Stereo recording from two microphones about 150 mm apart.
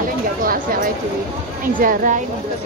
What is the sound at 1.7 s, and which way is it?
Speech, 60° right (ahead or behind).